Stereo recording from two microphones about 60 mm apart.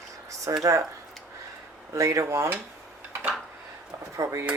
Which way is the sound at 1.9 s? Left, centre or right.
Right.